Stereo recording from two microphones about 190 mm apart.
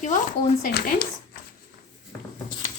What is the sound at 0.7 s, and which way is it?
Speech, 55° left (ahead or behind).